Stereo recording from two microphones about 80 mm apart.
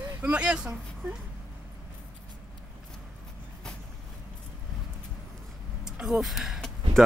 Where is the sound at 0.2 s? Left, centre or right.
Centre.